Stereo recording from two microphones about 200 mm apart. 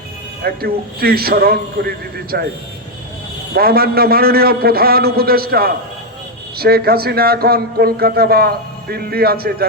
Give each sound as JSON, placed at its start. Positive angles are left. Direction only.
{"t": 0.4, "sound": "a man's voice", "side_deg": -50}
{"t": 3.5, "sound": "a man's voice", "side_deg": -50}